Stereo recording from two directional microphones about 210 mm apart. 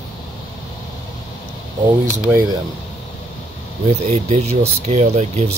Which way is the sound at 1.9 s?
15° right (ahead or behind).